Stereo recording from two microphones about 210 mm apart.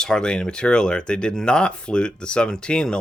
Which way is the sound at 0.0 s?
5° left (ahead or behind).